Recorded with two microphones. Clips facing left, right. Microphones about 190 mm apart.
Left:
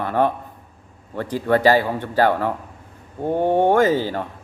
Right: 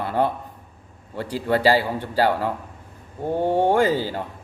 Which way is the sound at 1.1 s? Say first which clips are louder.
Left 3 dB; 10° right (ahead or behind).